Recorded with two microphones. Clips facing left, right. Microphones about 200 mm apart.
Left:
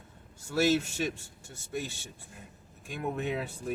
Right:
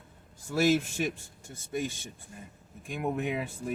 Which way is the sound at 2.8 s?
15° right (ahead or behind).